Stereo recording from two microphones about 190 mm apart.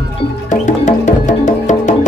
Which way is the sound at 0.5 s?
40° left (ahead or behind).